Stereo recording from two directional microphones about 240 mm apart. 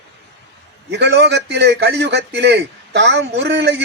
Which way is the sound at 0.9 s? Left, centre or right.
Right.